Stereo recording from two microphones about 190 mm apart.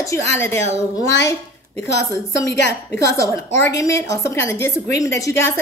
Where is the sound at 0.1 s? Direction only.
15° left (ahead or behind).